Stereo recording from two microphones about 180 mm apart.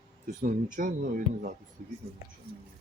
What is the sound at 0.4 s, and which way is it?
Speech, 45° right (ahead or behind).